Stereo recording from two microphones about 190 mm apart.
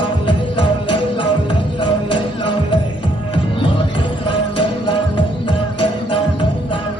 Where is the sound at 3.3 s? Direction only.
25° left (ahead or behind).